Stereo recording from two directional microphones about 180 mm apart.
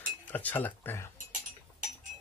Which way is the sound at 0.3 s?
10° left (ahead or behind).